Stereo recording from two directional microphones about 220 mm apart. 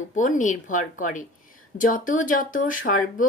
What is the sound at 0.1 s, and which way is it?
Speech, 35° left (ahead or behind).